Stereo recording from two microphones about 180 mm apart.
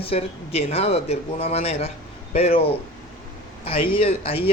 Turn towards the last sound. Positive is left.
turn(degrees=30)  # may be behind; listen again after turning